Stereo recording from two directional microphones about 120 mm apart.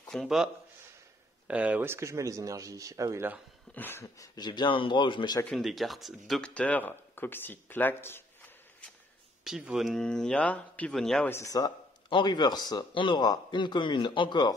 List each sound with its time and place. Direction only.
0.1 s a man's voice: centre (ahead or behind)
1.5 s speech: 10° right (ahead or behind); by 3.3 s 25° right (ahead or behind)
3.7 s a sound: 20° left (ahead or behind)
4.4 s a man's voice: 40° left (ahead or behind)
5.5 s speech: centre (ahead or behind); by 8.2 s 15° left (ahead or behind)
9.4 s a man's voice: 5° right (ahead or behind)
11.2 s a sound: 20° left (ahead or behind)
12.1 s a man's voice: 40° left (ahead or behind)